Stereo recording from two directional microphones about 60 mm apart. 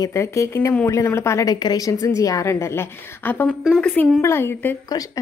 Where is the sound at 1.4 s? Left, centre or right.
Left.